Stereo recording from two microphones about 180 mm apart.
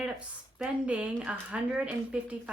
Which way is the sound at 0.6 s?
5° right (ahead or behind).